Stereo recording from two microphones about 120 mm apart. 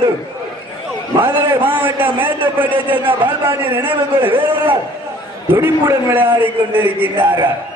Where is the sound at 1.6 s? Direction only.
15° right (ahead or behind).